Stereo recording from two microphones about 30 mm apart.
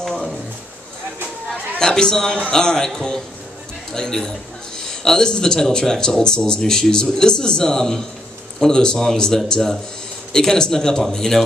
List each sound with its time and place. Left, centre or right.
1.8 s speech: left
3.9 s a man's voice: centre